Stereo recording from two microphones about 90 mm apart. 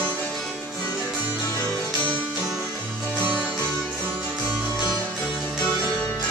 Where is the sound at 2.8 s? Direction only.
20° right (ahead or behind).